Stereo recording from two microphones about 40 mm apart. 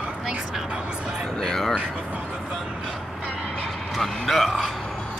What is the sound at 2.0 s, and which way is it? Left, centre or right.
Vehicle, right.